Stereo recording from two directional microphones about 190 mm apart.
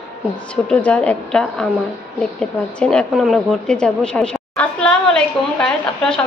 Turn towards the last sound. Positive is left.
turn(degrees=5)  # may be behind; listen again after turning